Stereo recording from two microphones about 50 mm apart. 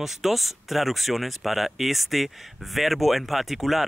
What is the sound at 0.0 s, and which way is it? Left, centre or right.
Speech, centre.